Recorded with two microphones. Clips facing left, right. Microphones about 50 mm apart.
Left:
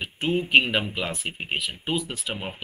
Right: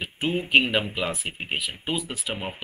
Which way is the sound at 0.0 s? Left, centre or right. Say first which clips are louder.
Left 1 dB; centre.